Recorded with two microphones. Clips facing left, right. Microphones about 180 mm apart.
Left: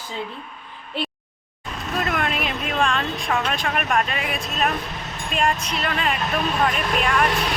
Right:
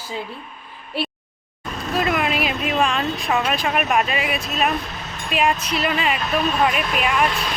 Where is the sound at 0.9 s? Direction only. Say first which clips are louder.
Right 2 dB; 10° right (ahead or behind).